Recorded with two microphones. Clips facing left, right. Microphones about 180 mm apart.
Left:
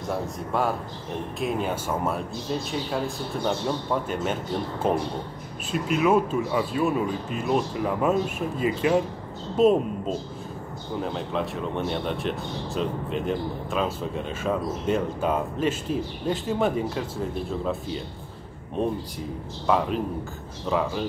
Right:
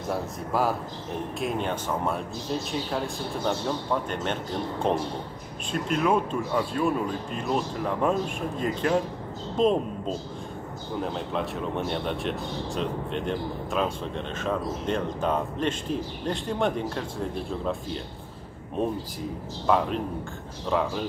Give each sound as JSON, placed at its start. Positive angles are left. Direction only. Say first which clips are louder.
{"t": 0.1, "sound": "speech", "louder": "left 1 dB", "side_deg": 0}
{"t": 3.4, "sound": "a woman's voice", "louder": "left 1 dB", "side_deg": 5}